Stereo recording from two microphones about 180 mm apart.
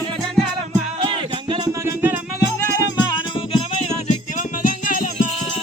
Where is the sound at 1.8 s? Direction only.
10° right (ahead or behind).